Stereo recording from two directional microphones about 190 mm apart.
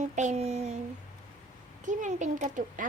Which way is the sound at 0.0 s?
40° right (ahead or behind).